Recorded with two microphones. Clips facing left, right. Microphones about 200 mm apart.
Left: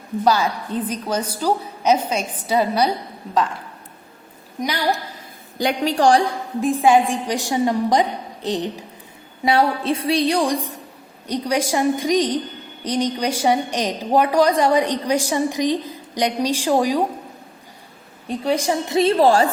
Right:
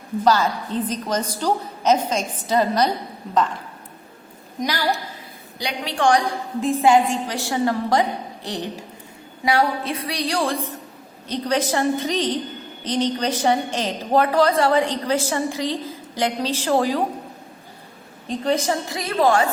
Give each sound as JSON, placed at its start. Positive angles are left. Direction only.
{"t": 0.3, "sound": "a woman's voice", "side_deg": 10}
{"t": 5.5, "sound": "a woman's voice", "side_deg": 45}
{"t": 6.6, "sound": "a woman's voice", "side_deg": 15}
{"t": 18.3, "sound": "a woman's voice", "side_deg": 10}
{"t": 18.9, "sound": "a woman's voice", "side_deg": 30}